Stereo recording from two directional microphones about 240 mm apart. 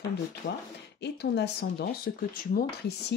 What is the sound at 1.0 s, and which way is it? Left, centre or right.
Speech, left.